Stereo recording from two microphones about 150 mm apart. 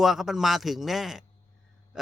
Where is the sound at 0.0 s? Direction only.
Centre (ahead or behind).